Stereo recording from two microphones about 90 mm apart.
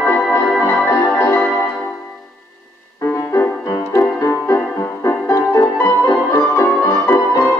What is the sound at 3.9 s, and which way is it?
Music, 35° left (ahead or behind).